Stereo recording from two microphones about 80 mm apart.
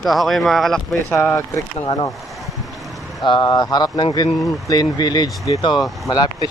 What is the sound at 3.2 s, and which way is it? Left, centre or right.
Speech, left.